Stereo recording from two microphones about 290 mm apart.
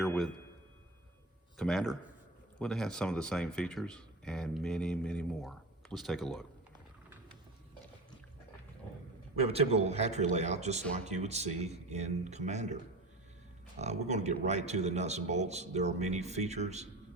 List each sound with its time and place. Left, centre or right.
0.0 s a sound: centre
1.5 s speech: centre
9.3 s speech: right
13.7 s speech: right